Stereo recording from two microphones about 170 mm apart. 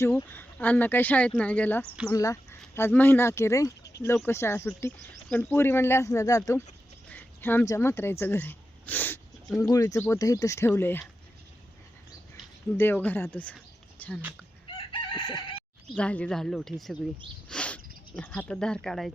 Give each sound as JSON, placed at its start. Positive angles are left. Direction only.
{"t": 0.0, "sound": "speech", "side_deg": 15}
{"t": 2.0, "sound": "speech", "side_deg": 20}
{"t": 12.7, "sound": "speech", "side_deg": 10}
{"t": 14.7, "sound": "chicken", "side_deg": 30}
{"t": 16.0, "sound": "a woman's voice", "side_deg": 5}
{"t": 17.5, "sound": "a sound", "side_deg": 5}
{"t": 18.2, "sound": "a woman's voice", "side_deg": 5}